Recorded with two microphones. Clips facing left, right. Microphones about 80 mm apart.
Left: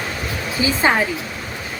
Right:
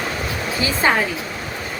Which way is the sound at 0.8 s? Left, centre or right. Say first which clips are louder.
Even; centre.